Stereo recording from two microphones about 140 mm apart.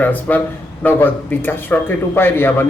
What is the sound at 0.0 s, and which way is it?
Speech, 10° left (ahead or behind).